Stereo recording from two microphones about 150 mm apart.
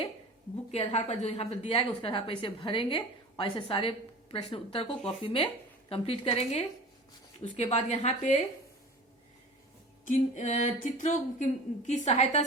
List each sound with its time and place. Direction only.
0.7 s a woman's voice: 40° left (ahead or behind)
10.1 s a sound: 50° left (ahead or behind)
11.9 s a woman's voice: 50° left (ahead or behind)